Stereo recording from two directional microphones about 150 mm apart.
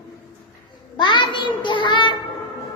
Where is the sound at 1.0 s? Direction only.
30° left (ahead or behind).